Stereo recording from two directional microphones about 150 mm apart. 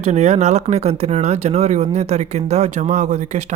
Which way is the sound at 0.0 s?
45° right (ahead or behind).